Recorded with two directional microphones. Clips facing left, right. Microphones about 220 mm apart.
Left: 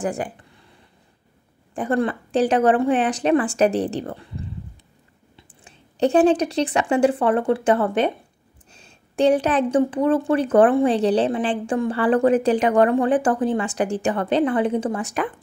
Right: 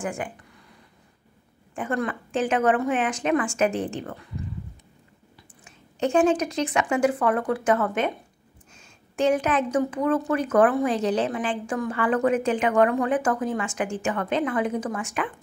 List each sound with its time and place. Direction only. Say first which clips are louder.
0.0 s a woman's voice: left 5 dB; 35° left (ahead or behind)
1.8 s a woman's voice: left 6 dB; 35° left (ahead or behind)